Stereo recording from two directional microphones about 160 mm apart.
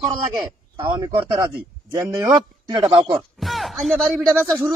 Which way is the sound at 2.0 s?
20° right (ahead or behind).